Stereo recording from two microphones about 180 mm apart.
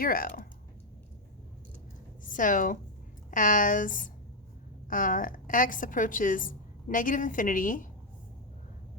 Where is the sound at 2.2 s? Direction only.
45° left (ahead or behind).